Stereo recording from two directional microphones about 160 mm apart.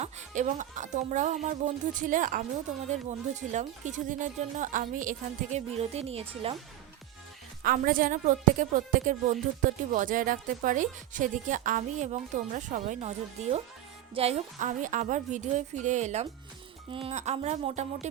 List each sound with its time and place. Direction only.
0.0 s speech: 50° right (ahead or behind)
7.6 s speech: 65° right (ahead or behind); by 18.1 s 45° right (ahead or behind)